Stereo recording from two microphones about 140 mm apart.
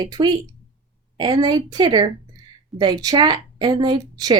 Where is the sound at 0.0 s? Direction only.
30° right (ahead or behind).